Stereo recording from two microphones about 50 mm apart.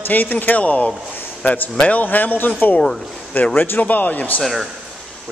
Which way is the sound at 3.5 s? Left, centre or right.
Left.